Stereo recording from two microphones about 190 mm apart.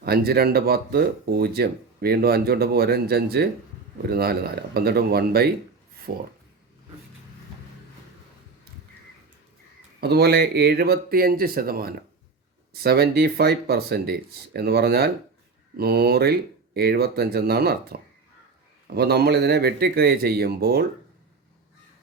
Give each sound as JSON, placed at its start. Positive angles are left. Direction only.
{"t": 0.0, "sound": "speech", "side_deg": -55}
{"t": 10.0, "sound": "speech", "side_deg": -60}